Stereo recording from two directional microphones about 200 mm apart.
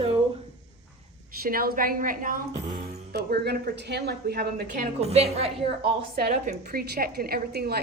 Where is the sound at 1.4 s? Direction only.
50° right (ahead or behind); by 5.5 s 30° right (ahead or behind).